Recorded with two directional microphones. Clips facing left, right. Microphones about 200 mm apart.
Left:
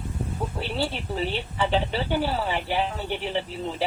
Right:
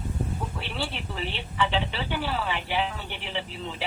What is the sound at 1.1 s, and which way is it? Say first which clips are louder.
A woman's voice: left 2 dB; 40° left (ahead or behind).